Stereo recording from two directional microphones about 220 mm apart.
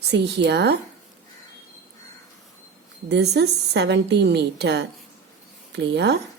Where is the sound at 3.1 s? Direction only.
50° right (ahead or behind).